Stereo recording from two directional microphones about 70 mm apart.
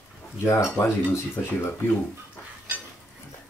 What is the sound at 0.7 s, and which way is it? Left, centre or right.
Speech, left.